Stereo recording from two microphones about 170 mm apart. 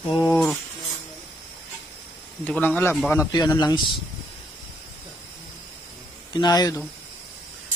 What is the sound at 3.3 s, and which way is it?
Speech, 25° left (ahead or behind).